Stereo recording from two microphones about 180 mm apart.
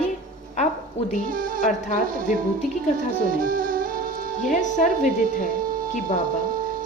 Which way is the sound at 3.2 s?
50° right (ahead or behind).